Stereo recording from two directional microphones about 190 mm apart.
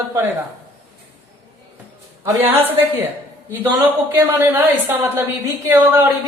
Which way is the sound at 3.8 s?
10° right (ahead or behind).